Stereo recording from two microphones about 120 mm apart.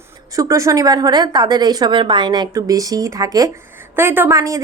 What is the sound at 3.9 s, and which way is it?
Speech, 15° right (ahead or behind).